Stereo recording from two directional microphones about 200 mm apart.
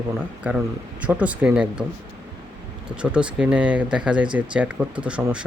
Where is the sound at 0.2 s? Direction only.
10° right (ahead or behind).